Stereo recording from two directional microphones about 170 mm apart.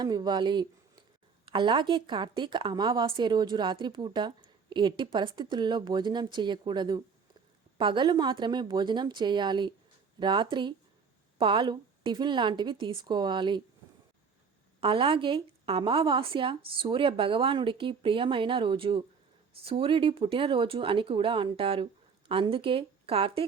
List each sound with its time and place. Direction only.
0.0 s a woman's voice: 25° right (ahead or behind)
14.8 s a woman's voice: 30° right (ahead or behind)